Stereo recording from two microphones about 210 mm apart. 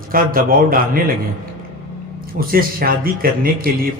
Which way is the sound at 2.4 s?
45° right (ahead or behind).